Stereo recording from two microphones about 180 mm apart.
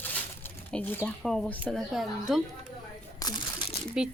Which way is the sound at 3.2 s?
20° left (ahead or behind).